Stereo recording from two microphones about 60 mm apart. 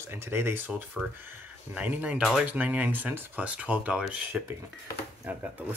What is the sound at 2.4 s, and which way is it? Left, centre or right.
Speech, right.